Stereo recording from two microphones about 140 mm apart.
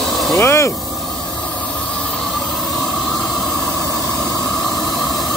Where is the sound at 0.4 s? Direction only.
20° left (ahead or behind).